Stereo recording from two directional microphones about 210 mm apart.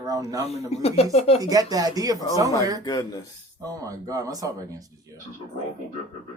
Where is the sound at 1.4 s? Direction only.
20° right (ahead or behind).